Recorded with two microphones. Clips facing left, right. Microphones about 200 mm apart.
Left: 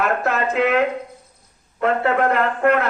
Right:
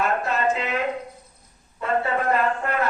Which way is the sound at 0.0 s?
65° left (ahead or behind).